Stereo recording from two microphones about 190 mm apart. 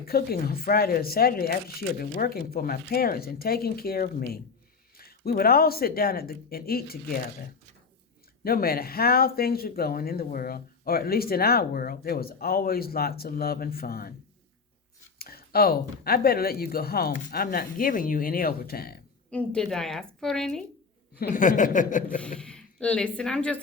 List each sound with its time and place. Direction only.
0.0 s speech: 50° left (ahead or behind)
8.4 s speech: 50° left (ahead or behind)
15.2 s speech: 55° left (ahead or behind)
19.3 s a woman's voice: 5° left (ahead or behind)
21.2 s speech: 45° left (ahead or behind)
22.4 s speech: 5° left (ahead or behind)